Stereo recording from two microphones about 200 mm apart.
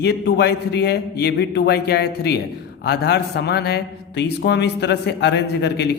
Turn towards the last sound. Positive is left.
turn(degrees=55)  # may be behind; listen again after turning